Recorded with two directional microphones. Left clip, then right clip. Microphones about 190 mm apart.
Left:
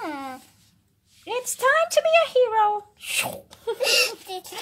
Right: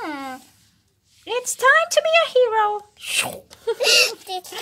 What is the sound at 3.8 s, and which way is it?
Speech, 50° right (ahead or behind).